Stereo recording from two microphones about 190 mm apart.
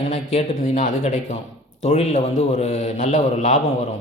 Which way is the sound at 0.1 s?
35° left (ahead or behind).